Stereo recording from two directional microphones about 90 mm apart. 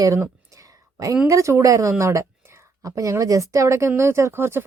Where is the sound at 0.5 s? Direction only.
40° right (ahead or behind).